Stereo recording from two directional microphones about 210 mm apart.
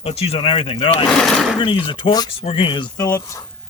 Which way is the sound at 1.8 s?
25° left (ahead or behind).